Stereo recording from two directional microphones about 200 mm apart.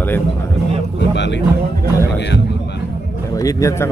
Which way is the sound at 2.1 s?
55° left (ahead or behind).